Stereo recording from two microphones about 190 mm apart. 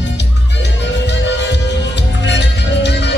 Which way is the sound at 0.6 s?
65° left (ahead or behind).